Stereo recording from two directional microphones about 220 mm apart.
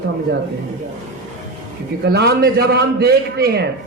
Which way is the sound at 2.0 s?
50° right (ahead or behind).